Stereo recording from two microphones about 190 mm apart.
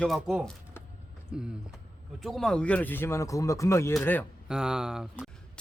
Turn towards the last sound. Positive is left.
turn(degrees=-5)  # may be behind; listen again after turning